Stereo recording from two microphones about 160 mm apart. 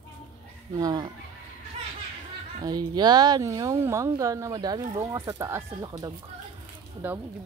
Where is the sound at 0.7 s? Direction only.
25° right (ahead or behind).